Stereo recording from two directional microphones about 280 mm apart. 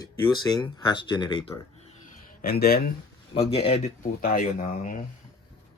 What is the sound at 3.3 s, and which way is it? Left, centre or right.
Speech, centre.